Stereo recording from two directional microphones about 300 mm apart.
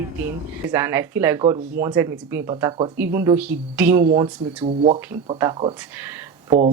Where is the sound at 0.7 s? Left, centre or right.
Centre.